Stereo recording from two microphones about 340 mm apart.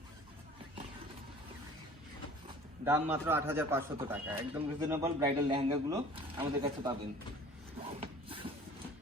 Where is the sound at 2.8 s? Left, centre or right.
Centre.